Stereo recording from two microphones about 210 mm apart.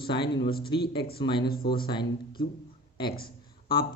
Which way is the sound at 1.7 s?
25° left (ahead or behind).